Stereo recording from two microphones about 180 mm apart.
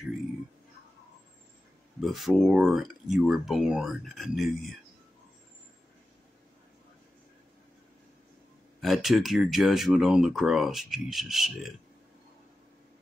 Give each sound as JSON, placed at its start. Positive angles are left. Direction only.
{"t": 2.0, "sound": "speech", "side_deg": 0}
{"t": 8.8, "sound": "speech", "side_deg": 0}